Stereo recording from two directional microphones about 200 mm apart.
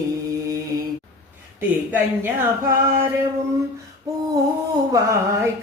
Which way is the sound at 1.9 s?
10° right (ahead or behind).